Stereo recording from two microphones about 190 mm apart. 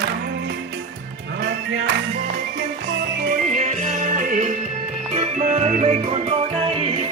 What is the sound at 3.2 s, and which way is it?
Music, 40° right (ahead or behind).